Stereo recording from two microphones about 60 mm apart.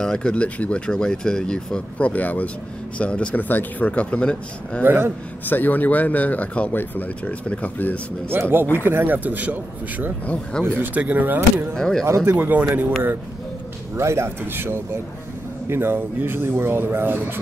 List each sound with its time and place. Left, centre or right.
0.0 s speech: centre
3.4 s speech: left
3.9 s speech: left
4.8 s speech: right
5.4 s speech: left
8.3 s speech: right
10.2 s speech: left
11.0 s speech: right
11.7 s speech: centre
12.3 s speech: right
13.9 s speech: right